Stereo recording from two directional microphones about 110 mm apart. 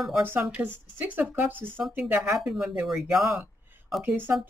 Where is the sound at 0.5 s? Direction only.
15° right (ahead or behind).